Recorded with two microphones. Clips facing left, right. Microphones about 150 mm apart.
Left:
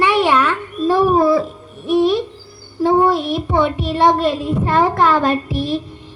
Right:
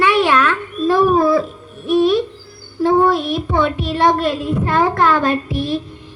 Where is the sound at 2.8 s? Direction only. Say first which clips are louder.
Even; 15° left (ahead or behind).